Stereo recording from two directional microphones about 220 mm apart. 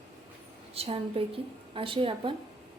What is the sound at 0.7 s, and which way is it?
A woman's voice, 25° right (ahead or behind).